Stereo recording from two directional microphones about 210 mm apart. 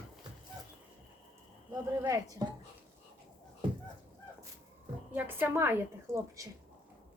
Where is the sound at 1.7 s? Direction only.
15° right (ahead or behind).